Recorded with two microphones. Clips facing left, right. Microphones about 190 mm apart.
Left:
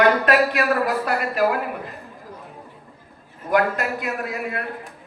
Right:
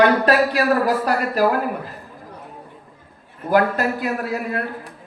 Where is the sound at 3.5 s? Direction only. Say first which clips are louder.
Right 3 dB; 35° right (ahead or behind).